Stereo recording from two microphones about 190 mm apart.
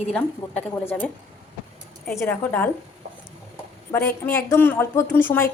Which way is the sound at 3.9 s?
15° left (ahead or behind).